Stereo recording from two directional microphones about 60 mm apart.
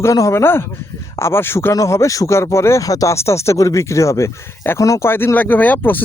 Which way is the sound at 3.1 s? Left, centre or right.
Left.